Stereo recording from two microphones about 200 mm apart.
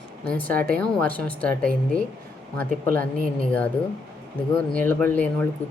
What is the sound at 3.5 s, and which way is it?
Speech, 10° left (ahead or behind).